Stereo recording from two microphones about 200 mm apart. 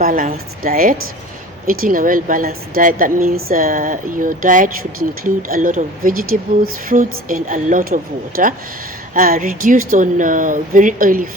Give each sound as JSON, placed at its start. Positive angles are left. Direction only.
{"t": 0.0, "sound": "a woman's voice", "side_deg": -45}